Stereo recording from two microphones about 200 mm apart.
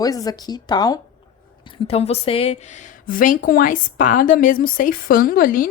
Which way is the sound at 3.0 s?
40° left (ahead or behind).